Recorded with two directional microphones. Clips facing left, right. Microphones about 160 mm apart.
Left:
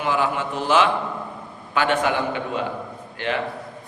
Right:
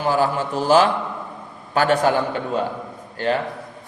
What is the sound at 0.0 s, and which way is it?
A man's voice, 35° right (ahead or behind).